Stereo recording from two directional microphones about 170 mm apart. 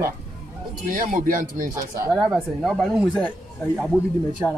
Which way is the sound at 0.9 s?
55° right (ahead or behind).